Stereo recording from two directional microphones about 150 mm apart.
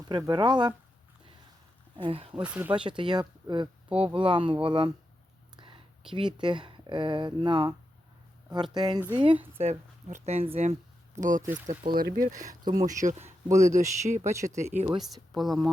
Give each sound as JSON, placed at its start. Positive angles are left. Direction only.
{"t": 0.1, "sound": "speech", "side_deg": -30}
{"t": 2.0, "sound": "speech", "side_deg": -40}
{"t": 2.3, "sound": "speech", "side_deg": -10}
{"t": 2.7, "sound": "speech", "side_deg": -35}
{"t": 9.6, "sound": "speech", "side_deg": -50}
{"t": 12.5, "sound": "speech", "side_deg": -25}
{"t": 12.8, "sound": "speech", "side_deg": -55}
{"t": 14.9, "sound": "speech", "side_deg": 0}